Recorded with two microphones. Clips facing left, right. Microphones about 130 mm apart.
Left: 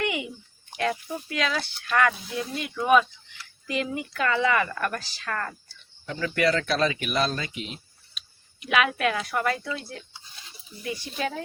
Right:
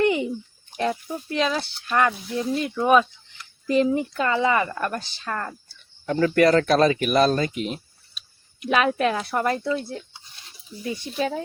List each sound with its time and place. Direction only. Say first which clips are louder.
0.0 s a sound: right 8 dB; 35° right (ahead or behind)
0.8 s speech: right 2 dB; 25° right (ahead or behind)
4.1 s a woman's voice: right 2 dB; 20° right (ahead or behind)
6.1 s speech: right 7 dB; 45° right (ahead or behind)
8.6 s speech: right 3 dB; 35° right (ahead or behind)
9.7 s speech: right 8 dB; 20° right (ahead or behind)
11.2 s a woman's voice: right 5 dB; 25° right (ahead or behind)